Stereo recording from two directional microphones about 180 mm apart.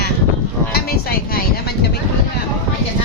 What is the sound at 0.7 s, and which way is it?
Speech, 55° left (ahead or behind).